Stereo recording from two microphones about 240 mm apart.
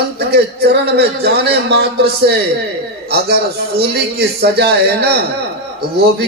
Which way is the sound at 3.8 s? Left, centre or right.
Right.